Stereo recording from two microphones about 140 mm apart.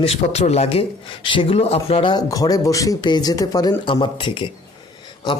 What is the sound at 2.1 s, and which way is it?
Speech, 25° left (ahead or behind).